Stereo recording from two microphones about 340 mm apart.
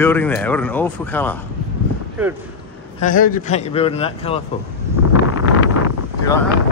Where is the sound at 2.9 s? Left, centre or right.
Left.